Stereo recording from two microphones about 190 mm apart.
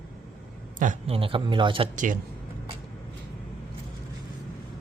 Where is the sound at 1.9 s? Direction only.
45° right (ahead or behind).